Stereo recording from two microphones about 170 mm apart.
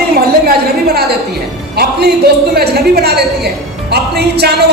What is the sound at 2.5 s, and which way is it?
A woman's voice, 65° right (ahead or behind).